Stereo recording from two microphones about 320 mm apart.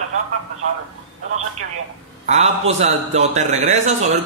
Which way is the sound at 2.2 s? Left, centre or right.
Centre.